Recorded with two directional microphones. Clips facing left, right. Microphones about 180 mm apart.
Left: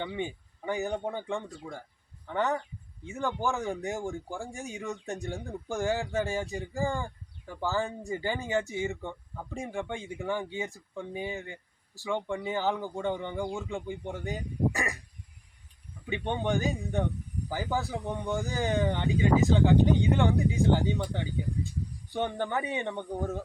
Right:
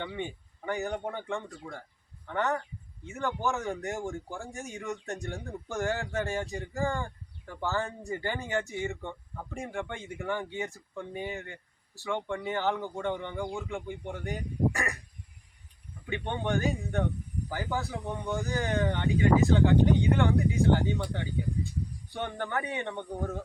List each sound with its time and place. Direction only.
0.0 s a man's voice: 15° left (ahead or behind)
13.7 s speech: 15° left (ahead or behind)
16.0 s speech: 15° left (ahead or behind)
18.2 s speech: centre (ahead or behind)
18.4 s speech: 15° left (ahead or behind)